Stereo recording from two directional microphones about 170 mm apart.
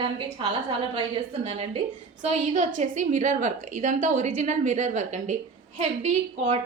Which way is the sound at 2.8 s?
45° right (ahead or behind).